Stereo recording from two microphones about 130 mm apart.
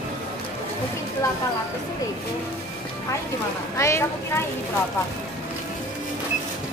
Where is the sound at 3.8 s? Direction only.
20° left (ahead or behind).